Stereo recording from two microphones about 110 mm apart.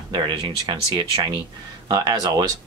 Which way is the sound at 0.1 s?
45° right (ahead or behind).